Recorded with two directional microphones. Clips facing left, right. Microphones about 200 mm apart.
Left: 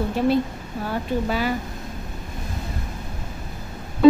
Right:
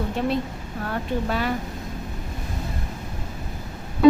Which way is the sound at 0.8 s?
5° left (ahead or behind).